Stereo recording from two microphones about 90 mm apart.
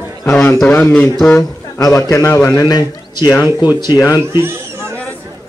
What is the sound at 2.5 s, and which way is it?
Speech, 45° left (ahead or behind).